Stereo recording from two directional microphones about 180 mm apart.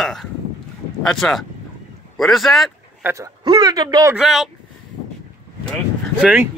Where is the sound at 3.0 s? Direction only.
15° right (ahead or behind).